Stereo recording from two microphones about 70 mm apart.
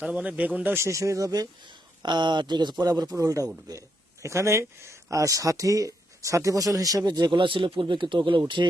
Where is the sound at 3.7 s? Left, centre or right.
Right.